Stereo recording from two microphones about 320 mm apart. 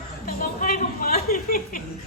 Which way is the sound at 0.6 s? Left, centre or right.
Left.